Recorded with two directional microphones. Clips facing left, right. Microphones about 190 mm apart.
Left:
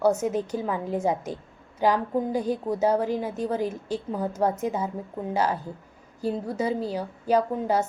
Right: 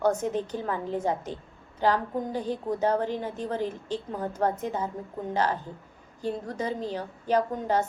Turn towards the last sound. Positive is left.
turn(degrees=5)  # may be behind; listen again after turning